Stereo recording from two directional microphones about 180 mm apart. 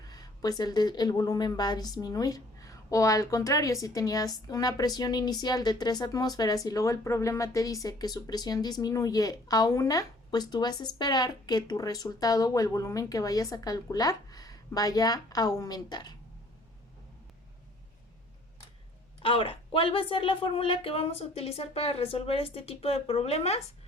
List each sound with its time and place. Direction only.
0.0 s a woman's voice: 20° left (ahead or behind)
19.2 s a woman's voice: 30° left (ahead or behind)